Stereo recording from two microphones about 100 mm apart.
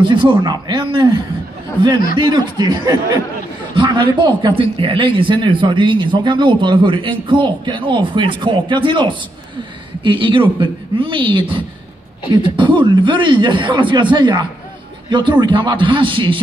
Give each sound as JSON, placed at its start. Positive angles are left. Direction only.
{"t": 0.0, "sound": "a man's voice", "side_deg": -55}